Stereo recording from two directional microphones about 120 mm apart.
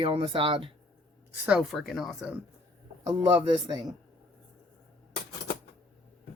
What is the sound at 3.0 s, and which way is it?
Speech, 35° right (ahead or behind).